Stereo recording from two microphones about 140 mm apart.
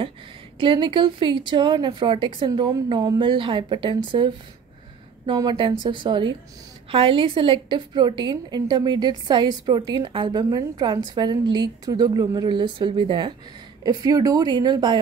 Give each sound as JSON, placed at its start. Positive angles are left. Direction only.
{"t": 0.6, "sound": "a woman's voice", "side_deg": -35}